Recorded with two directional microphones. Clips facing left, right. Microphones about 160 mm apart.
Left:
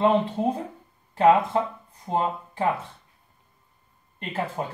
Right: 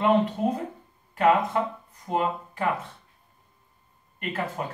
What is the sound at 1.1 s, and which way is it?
Speech, 30° left (ahead or behind).